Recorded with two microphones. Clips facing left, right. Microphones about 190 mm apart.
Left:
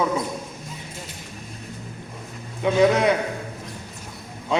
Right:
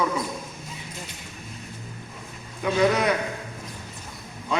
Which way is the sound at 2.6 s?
25° left (ahead or behind).